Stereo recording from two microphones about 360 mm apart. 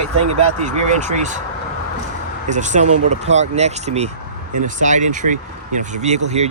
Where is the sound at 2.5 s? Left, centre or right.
Centre.